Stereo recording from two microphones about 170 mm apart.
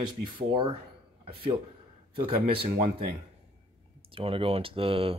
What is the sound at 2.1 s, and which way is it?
Speech, 35° right (ahead or behind).